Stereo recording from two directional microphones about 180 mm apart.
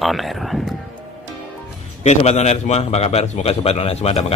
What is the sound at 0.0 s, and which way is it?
Speech, centre (ahead or behind).